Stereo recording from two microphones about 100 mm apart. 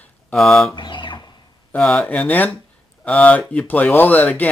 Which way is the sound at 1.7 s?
15° left (ahead or behind).